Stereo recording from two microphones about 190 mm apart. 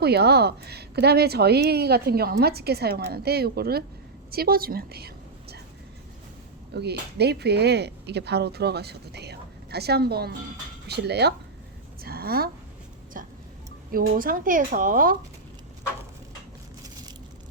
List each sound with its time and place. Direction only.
0.0 s a woman's voice: 60° right (ahead or behind)
6.7 s a woman's voice: 60° right (ahead or behind)
13.2 s music: 45° right (ahead or behind)
13.9 s speech: 50° right (ahead or behind)